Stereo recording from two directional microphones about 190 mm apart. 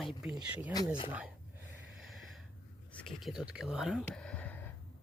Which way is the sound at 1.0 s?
10° right (ahead or behind).